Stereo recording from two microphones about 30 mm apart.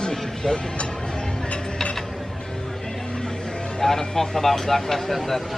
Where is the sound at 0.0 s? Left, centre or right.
Left.